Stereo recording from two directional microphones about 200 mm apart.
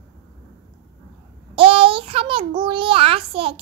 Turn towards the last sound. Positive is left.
turn(degrees=-25)  # may be behind; listen again after turning